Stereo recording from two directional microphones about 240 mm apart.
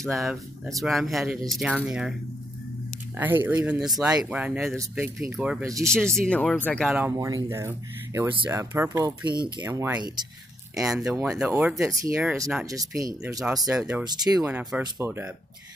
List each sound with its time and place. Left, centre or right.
0.0 s speech: centre
3.2 s speech: centre
5.9 s speech: centre
13.7 s speech: centre
14.0 s speech: centre
14.4 s speech: centre